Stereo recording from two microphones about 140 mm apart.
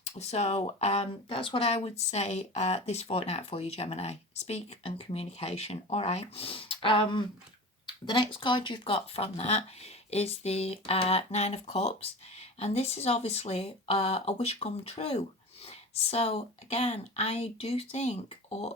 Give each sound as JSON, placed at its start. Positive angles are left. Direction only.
{"t": 0.0, "sound": "speech", "side_deg": 50}